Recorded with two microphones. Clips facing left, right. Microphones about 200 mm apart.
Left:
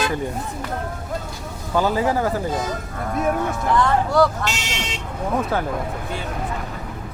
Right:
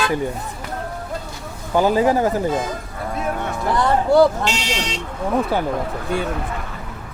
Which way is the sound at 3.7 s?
35° right (ahead or behind).